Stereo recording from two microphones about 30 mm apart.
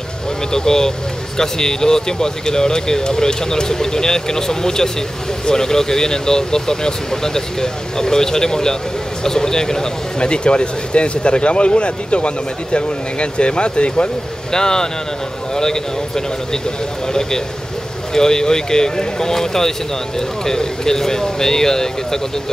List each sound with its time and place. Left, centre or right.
0.5 s speech: left
10.2 s speech: left
14.5 s speech: left
18.1 s speech: centre